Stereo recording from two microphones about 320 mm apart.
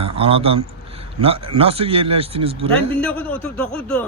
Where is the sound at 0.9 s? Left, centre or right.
Centre.